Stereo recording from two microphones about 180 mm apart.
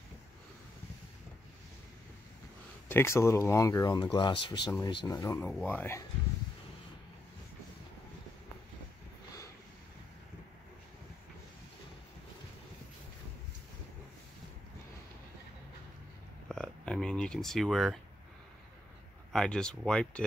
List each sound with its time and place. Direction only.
2.9 s speech: 15° left (ahead or behind)
16.4 s a sound: centre (ahead or behind)
19.3 s speech: 5° left (ahead or behind)